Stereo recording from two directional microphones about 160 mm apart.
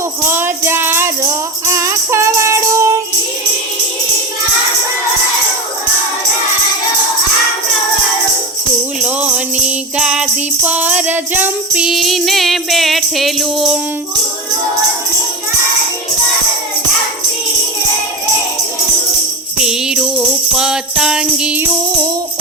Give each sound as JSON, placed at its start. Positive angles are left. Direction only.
{"t": 0.3, "sound": "music", "side_deg": -15}
{"t": 9.0, "sound": "music", "side_deg": -10}
{"t": 19.5, "sound": "jingle bell", "side_deg": -5}